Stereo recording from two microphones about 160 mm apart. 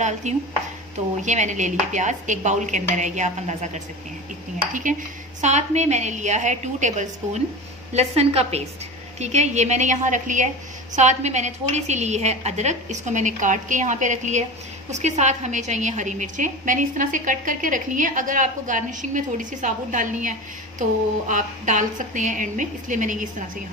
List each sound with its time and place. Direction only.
0.2 s a woman's voice: 45° right (ahead or behind)
5.4 s a woman's voice: 45° right (ahead or behind)